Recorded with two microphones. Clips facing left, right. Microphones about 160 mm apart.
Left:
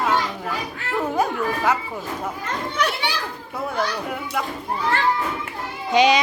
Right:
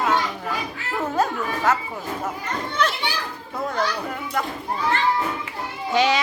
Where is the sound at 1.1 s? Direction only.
10° left (ahead or behind).